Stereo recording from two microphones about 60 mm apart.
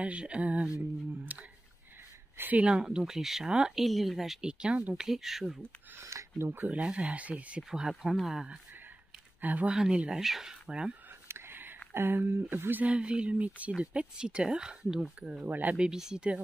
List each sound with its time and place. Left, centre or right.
0.0 s speech: centre
2.6 s speech: centre
3.8 s speech: centre
4.9 s speech: centre
5.9 s speech: right
6.7 s speech: right
8.2 s speech: centre
9.4 s speech: right
9.7 s speech: centre
11.2 s a sound: right
11.9 s speech: right
12.8 s speech: centre
15.4 s speech: right
15.7 s speech: centre